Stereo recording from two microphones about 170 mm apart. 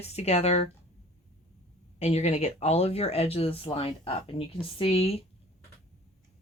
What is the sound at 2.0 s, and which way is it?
Speech, 40° left (ahead or behind).